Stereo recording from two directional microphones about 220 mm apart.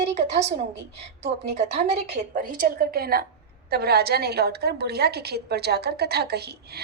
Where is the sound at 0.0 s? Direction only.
30° right (ahead or behind).